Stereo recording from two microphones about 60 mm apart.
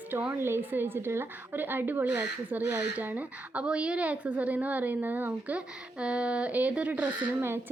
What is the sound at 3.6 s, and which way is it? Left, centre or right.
A woman's voice, centre.